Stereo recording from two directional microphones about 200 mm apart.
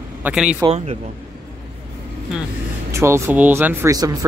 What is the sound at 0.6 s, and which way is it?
Speech, 30° right (ahead or behind).